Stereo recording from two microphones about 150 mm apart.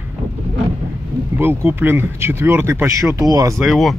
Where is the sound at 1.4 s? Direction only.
15° right (ahead or behind).